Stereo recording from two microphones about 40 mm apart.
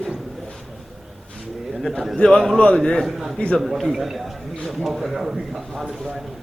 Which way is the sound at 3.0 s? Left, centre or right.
Centre.